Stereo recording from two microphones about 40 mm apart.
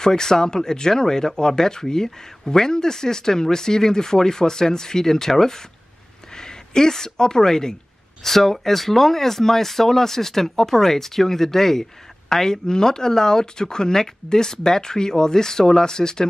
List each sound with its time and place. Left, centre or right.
0.0 s speech: centre